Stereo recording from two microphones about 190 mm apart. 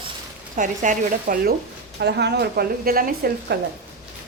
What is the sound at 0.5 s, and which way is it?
Speech, 40° right (ahead or behind).